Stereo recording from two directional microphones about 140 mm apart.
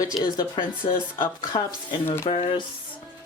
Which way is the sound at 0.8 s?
85° left.